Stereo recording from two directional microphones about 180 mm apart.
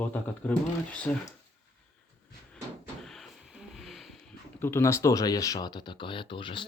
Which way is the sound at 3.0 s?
Centre (ahead or behind).